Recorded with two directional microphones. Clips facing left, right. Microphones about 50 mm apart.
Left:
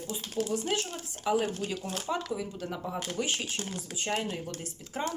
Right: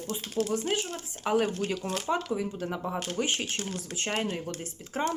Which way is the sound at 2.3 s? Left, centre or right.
Right.